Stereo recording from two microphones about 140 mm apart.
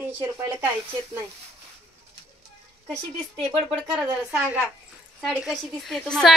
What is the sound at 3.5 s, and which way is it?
A woman's voice, 10° right (ahead or behind).